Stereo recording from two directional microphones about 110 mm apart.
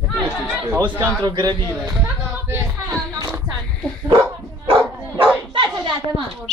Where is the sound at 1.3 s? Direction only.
35° right (ahead or behind).